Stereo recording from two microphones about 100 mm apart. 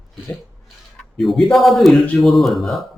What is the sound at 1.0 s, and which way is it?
A man's voice, centre (ahead or behind).